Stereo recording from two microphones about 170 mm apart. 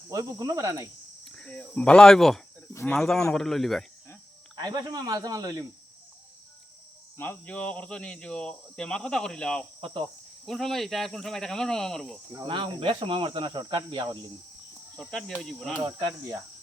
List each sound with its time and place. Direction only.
0.1 s speech: 20° right (ahead or behind)
1.2 s speech: 5° left (ahead or behind)
4.5 s speech: 20° right (ahead or behind)
7.2 s speech: 10° left (ahead or behind)
9.8 s cricket: 30° right (ahead or behind)
10.4 s speech: centre (ahead or behind)
12.5 s speech: 30° right (ahead or behind)
15.1 s speech: centre (ahead or behind)
15.8 s speech: 20° right (ahead or behind)